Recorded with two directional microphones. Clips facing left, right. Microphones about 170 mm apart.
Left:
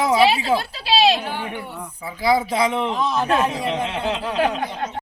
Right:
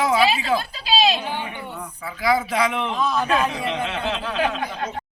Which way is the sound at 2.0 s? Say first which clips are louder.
Left 2 dB; 30° left (ahead or behind).